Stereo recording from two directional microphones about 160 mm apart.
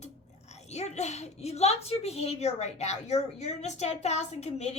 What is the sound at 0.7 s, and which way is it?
A woman's voice, 45° left (ahead or behind).